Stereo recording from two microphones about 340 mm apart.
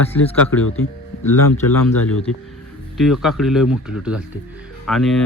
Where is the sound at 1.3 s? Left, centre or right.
Left.